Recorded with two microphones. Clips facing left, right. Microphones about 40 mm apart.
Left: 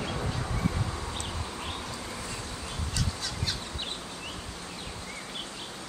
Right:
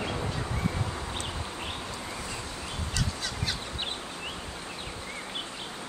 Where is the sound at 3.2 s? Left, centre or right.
Centre.